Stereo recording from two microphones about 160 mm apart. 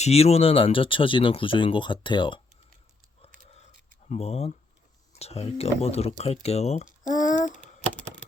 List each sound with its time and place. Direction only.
0.0 s speech: 40° left (ahead or behind)
3.2 s a sound: 40° left (ahead or behind)
4.1 s speech: 40° left (ahead or behind)